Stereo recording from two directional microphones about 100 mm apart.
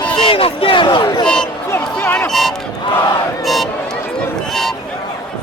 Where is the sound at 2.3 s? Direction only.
Centre (ahead or behind).